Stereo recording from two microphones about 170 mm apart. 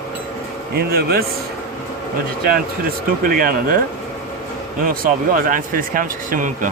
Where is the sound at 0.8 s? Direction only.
65° right (ahead or behind).